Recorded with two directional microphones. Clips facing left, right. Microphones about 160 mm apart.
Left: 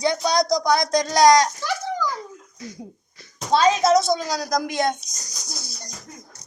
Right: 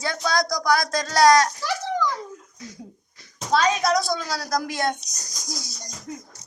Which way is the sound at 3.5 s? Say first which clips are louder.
Left 4 dB; 25° left (ahead or behind).